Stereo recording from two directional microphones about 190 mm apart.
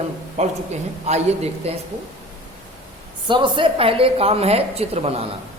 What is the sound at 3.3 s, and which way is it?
A woman's voice, 25° right (ahead or behind).